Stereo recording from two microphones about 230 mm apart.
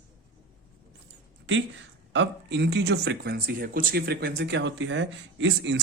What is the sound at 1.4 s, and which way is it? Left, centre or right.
Speech, right.